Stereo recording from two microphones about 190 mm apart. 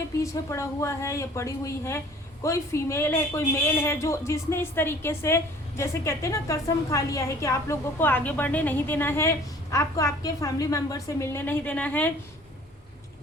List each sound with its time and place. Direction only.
0.2 s a woman's voice: 15° left (ahead or behind)